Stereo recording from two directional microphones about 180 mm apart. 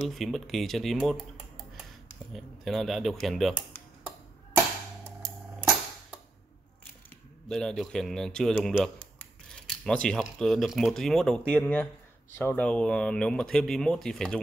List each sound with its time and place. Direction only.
0.1 s speech: centre (ahead or behind)
2.3 s speech: centre (ahead or behind)
7.4 s speech: centre (ahead or behind)